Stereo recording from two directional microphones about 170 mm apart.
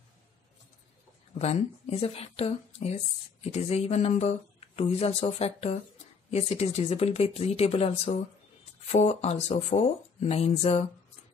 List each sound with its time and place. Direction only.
1.4 s speech: 40° left (ahead or behind)